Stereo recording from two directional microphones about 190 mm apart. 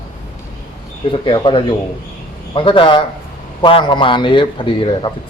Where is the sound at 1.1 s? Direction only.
25° left (ahead or behind).